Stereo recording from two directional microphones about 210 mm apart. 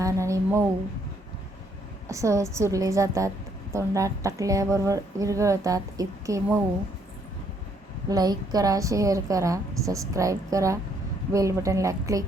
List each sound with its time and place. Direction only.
0.0 s a sound: 15° right (ahead or behind)
2.0 s a woman's voice: 15° right (ahead or behind)
8.1 s a woman's voice: 20° right (ahead or behind)